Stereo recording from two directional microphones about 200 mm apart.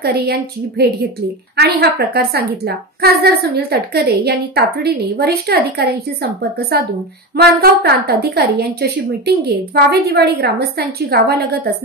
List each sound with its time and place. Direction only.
0.0 s a woman's voice: 50° right (ahead or behind)